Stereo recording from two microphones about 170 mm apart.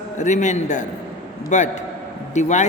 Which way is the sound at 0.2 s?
45° left (ahead or behind).